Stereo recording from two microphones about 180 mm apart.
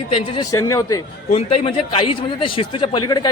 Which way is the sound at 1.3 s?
35° left (ahead or behind).